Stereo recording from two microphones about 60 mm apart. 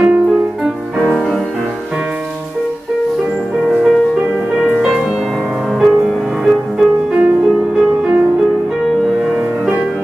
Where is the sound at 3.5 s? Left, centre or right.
Centre.